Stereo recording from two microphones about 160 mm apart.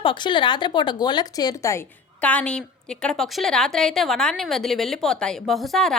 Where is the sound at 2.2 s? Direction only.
10° left (ahead or behind).